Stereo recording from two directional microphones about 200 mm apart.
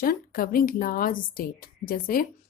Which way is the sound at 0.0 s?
45° left (ahead or behind).